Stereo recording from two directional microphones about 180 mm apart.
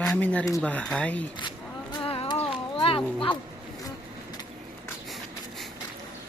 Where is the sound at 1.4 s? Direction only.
25° left (ahead or behind).